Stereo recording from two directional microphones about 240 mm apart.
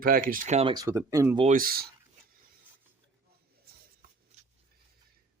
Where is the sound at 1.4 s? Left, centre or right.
Right.